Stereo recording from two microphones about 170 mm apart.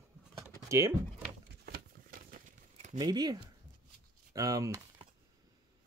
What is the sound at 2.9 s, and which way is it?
Speech, 25° right (ahead or behind).